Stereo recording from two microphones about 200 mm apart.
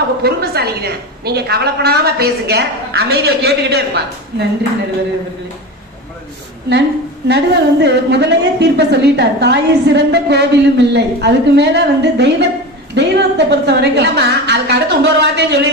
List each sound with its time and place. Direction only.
0.2 s a woman's voice: 50° right (ahead or behind)
7.3 s a woman's voice: 55° right (ahead or behind)